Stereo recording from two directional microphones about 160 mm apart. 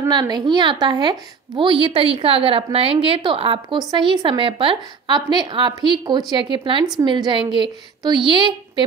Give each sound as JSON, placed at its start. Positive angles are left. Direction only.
{"t": 0.0, "sound": "a woman's voice", "side_deg": -25}